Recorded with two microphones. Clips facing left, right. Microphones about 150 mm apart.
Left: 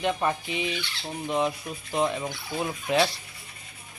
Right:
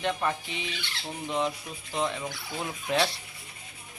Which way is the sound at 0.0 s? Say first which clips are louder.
Left 3 dB; 15° left (ahead or behind).